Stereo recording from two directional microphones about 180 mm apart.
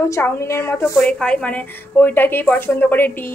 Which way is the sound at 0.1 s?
15° left (ahead or behind).